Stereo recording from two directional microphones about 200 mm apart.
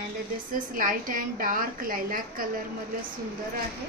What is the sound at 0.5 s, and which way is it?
A woman's voice, 40° right (ahead or behind).